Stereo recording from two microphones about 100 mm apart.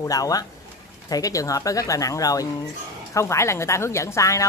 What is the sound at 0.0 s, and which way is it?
A woman's voice, 35° left (ahead or behind).